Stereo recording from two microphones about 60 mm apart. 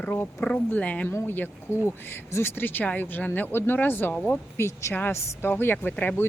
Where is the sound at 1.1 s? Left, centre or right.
Left.